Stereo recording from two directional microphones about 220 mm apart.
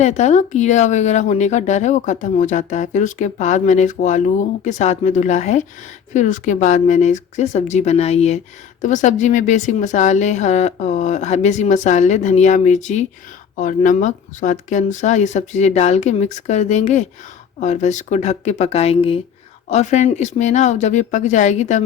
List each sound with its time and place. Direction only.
0.0 s speech: 30° left (ahead or behind)